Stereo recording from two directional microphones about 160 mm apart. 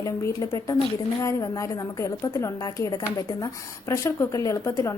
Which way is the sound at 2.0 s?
20° left (ahead or behind).